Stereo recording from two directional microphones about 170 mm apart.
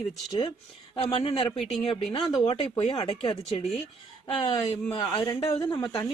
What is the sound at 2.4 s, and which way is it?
Speech, 25° left (ahead or behind).